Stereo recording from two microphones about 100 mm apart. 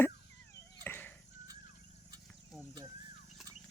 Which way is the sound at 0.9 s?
20° left (ahead or behind).